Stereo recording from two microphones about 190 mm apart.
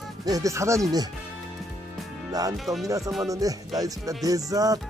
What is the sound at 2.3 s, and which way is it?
Speech, 20° right (ahead or behind).